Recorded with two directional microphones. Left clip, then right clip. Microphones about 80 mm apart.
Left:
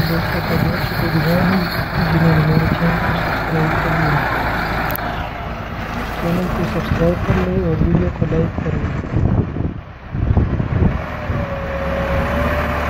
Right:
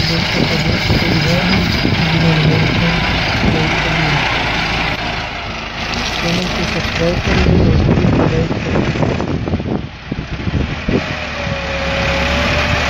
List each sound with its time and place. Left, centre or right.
2.2 s vehicle: centre